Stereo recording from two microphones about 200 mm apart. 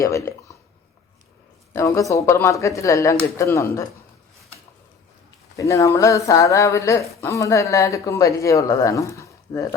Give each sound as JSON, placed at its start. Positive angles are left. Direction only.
{"t": 0.0, "sound": "speech", "side_deg": 15}
{"t": 1.7, "sound": "speech", "side_deg": 15}
{"t": 5.5, "sound": "speech", "side_deg": 15}